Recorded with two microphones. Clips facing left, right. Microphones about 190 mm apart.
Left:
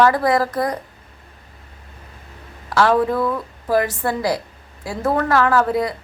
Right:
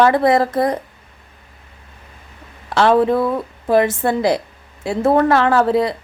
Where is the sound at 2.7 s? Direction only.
25° right (ahead or behind).